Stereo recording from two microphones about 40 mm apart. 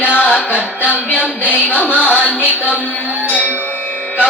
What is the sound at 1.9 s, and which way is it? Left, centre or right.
Music, right.